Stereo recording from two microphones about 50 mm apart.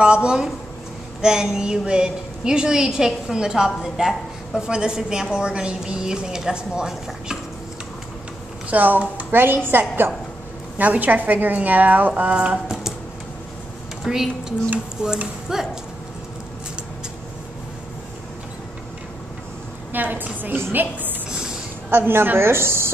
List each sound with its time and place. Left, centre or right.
0.0 s a woman's voice: centre
8.6 s a woman's voice: right
10.8 s a woman's voice: right
12.1 s speech: right
12.4 s a sound: centre
14.0 s a woman's voice: centre
19.9 s a woman's voice: right